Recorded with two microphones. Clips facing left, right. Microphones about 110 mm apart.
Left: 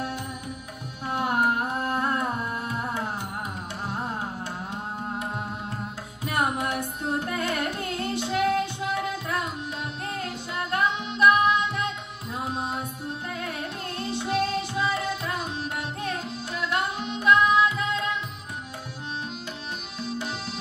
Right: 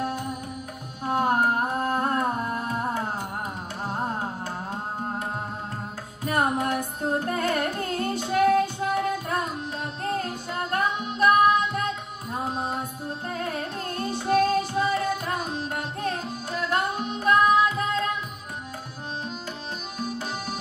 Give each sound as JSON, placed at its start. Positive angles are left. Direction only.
{"t": 1.0, "sound": "music", "side_deg": -40}
{"t": 6.2, "sound": "carnatic music", "side_deg": -40}
{"t": 10.0, "sound": "music", "side_deg": -40}
{"t": 20.0, "sound": "accordion", "side_deg": -40}